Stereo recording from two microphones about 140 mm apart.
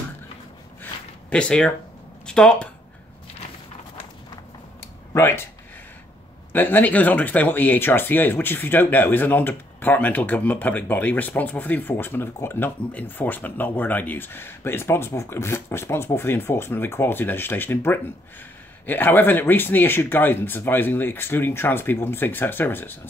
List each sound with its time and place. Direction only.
1.3 s speech: 5° left (ahead or behind)
4.7 s a sound: 15° left (ahead or behind)
6.5 s speech: 15° left (ahead or behind)